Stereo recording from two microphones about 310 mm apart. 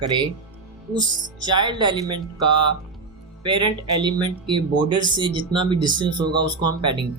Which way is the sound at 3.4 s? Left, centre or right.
Centre.